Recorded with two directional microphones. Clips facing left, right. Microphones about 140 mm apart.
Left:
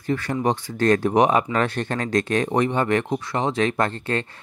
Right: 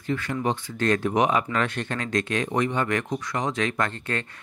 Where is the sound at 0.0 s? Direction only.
35° left (ahead or behind).